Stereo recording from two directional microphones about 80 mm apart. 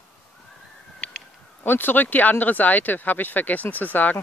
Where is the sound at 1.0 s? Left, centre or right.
Centre.